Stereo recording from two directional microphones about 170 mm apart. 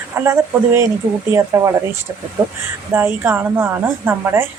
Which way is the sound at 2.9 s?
15° right (ahead or behind).